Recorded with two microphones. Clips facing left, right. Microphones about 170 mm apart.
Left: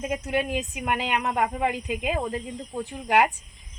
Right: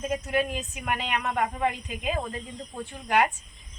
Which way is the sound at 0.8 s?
25° left (ahead or behind).